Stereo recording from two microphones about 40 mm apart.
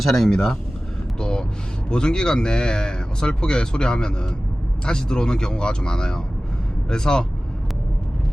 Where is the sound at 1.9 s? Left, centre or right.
Left.